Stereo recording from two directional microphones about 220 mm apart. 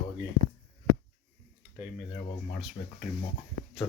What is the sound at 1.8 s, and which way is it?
Speech, centre (ahead or behind).